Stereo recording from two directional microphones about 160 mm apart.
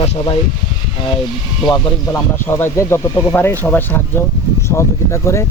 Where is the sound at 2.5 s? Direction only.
15° left (ahead or behind).